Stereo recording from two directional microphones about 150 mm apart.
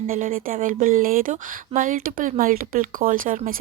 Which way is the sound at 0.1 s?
70° right (ahead or behind).